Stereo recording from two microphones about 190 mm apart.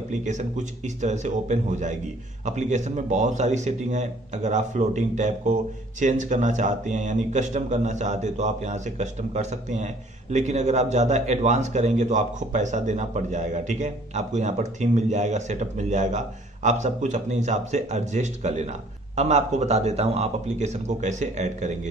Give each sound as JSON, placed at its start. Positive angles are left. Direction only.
{"t": 0.1, "sound": "speech", "side_deg": -40}